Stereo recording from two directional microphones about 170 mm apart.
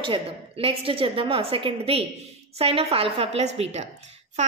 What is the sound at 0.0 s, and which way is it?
A woman's voice, 30° right (ahead or behind).